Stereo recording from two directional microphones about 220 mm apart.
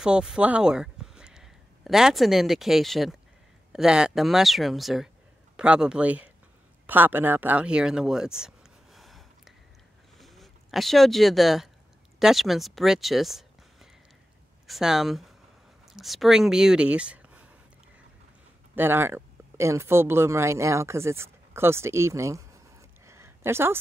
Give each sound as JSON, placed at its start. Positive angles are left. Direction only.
{"t": 0.0, "sound": "speech", "side_deg": -5}
{"t": 10.1, "sound": "a sound", "side_deg": 0}
{"t": 12.2, "sound": "speech", "side_deg": 0}
{"t": 18.8, "sound": "speech", "side_deg": -10}